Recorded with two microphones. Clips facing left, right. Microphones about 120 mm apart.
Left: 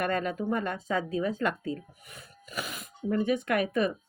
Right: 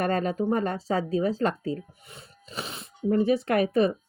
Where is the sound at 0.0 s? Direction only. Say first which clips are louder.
Right 4 dB; 35° right (ahead or behind).